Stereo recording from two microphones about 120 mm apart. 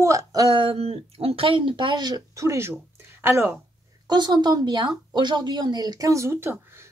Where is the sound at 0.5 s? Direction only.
50° right (ahead or behind); by 3.6 s 20° right (ahead or behind).